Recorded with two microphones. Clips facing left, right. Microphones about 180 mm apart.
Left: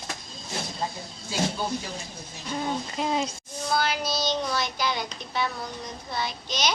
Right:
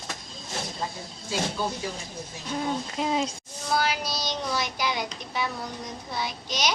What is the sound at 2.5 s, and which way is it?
Speech, centre (ahead or behind).